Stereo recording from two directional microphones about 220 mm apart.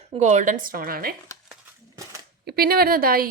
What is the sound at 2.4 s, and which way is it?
Speech, 45° right (ahead or behind).